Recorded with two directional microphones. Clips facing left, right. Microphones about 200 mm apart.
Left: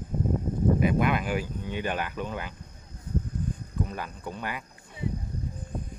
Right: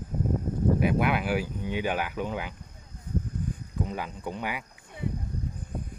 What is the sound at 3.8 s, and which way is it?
Speech, 15° right (ahead or behind).